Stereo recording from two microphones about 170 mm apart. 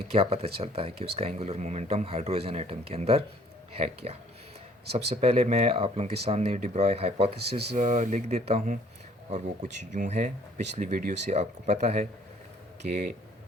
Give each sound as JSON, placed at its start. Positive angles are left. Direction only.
{"t": 0.1, "sound": "speech", "side_deg": -35}